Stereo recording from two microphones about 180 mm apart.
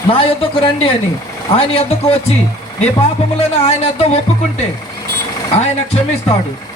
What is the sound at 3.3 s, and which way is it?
Speech, 35° left (ahead or behind).